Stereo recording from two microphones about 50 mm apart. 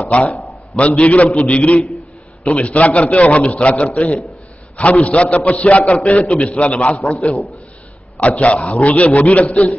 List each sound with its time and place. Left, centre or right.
0.1 s a man's voice: left